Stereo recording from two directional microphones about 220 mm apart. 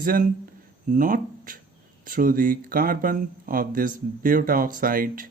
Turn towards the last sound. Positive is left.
turn(degrees=-40)  # may be behind; listen again after turning